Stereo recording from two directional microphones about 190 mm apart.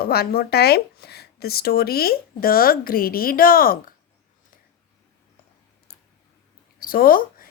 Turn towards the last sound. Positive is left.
turn(degrees=50)  # may be behind; listen again after turning